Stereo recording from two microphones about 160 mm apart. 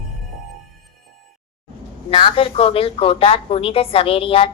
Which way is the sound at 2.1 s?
35° left (ahead or behind).